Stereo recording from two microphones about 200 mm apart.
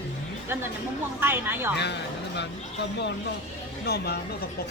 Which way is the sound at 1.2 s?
10° right (ahead or behind).